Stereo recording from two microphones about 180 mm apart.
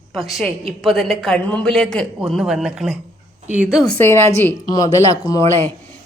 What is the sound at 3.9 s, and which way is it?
Speech, 15° left (ahead or behind).